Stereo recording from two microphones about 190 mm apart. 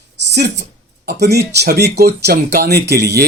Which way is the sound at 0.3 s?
60° right (ahead or behind).